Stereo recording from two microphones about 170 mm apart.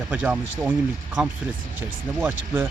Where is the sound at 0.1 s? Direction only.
5° right (ahead or behind).